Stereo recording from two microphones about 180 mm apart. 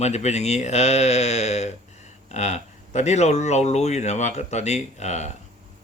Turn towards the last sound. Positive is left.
turn(degrees=40)  # may be behind; listen again after turning